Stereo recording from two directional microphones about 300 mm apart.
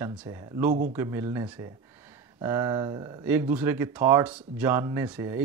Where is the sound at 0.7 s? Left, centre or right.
Right.